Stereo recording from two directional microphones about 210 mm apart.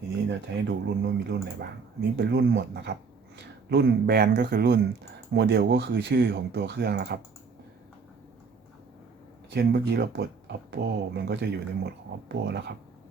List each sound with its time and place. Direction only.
0.3 s speech: 55° right (ahead or behind)
9.5 s speech: 55° right (ahead or behind)